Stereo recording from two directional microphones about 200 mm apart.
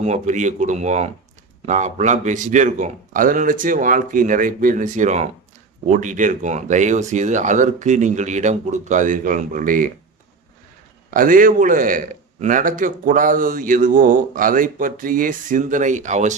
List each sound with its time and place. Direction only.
0.0 s speech: 35° right (ahead or behind)
11.1 s a man's voice: 45° right (ahead or behind)